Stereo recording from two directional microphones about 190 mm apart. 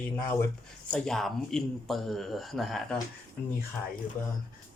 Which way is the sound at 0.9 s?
5° left (ahead or behind).